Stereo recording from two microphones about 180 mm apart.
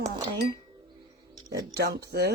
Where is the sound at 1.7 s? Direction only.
65° right (ahead or behind).